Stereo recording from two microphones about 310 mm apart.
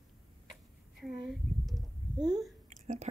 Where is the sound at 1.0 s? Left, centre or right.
Centre.